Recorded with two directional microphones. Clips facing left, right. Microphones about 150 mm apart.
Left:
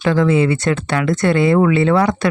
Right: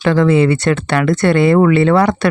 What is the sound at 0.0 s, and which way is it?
Speech, 65° right (ahead or behind).